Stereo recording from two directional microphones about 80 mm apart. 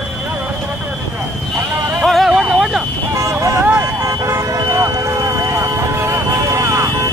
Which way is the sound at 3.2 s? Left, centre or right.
Right.